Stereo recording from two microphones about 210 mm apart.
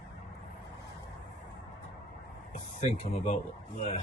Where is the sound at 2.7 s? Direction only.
35° left (ahead or behind).